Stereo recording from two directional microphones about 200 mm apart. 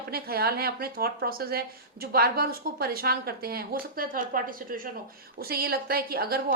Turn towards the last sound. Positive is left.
turn(degrees=-50)  # may be behind; listen again after turning